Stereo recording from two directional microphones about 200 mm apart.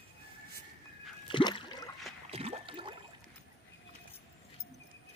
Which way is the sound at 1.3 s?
25° left (ahead or behind).